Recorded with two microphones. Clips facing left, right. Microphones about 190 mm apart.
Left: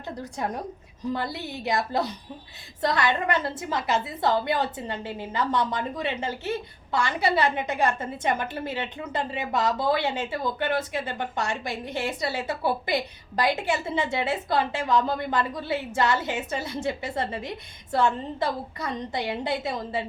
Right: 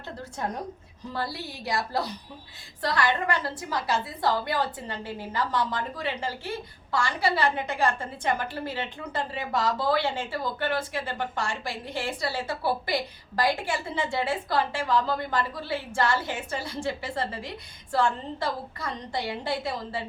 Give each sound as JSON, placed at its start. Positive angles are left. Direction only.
{"t": 1.1, "sound": "a woman's voice", "side_deg": 20}